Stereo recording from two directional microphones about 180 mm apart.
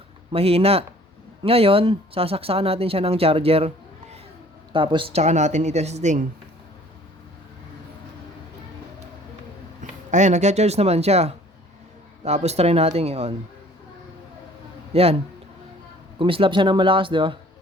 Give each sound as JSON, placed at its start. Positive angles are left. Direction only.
{"t": 0.3, "sound": "speech", "side_deg": -35}
{"t": 4.7, "sound": "speech", "side_deg": -30}
{"t": 10.1, "sound": "speech", "side_deg": -40}
{"t": 14.9, "sound": "speech", "side_deg": -35}
{"t": 16.1, "sound": "speech", "side_deg": -30}